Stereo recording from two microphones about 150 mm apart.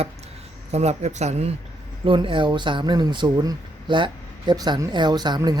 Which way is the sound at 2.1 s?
35° right (ahead or behind).